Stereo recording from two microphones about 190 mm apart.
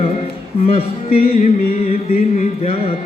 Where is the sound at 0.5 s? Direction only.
30° left (ahead or behind).